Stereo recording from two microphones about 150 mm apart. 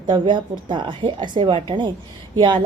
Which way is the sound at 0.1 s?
30° right (ahead or behind).